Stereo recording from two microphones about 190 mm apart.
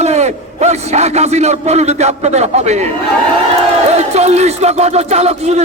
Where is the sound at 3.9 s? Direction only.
35° right (ahead or behind).